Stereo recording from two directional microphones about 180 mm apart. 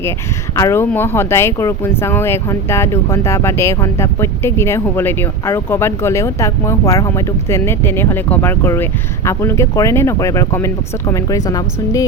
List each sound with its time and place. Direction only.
0.5 s speech: 15° left (ahead or behind)